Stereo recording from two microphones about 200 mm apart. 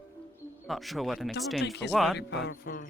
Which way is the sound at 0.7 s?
Centre (ahead or behind).